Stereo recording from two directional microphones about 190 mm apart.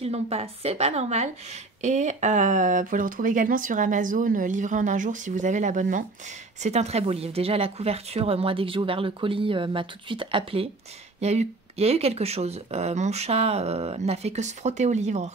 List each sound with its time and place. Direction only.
0.0 s a woman's voice: 30° right (ahead or behind)